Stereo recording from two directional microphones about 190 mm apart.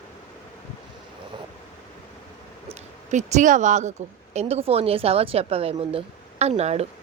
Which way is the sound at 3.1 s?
40° right (ahead or behind).